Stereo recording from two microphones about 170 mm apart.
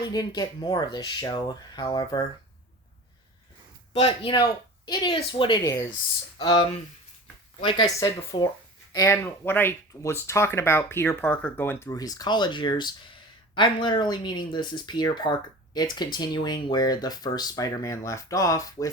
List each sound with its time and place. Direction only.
0.0 s speech: 25° left (ahead or behind)
3.9 s speech: 35° left (ahead or behind)